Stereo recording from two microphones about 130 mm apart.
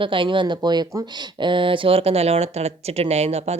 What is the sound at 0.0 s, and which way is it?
Speech, 40° right (ahead or behind).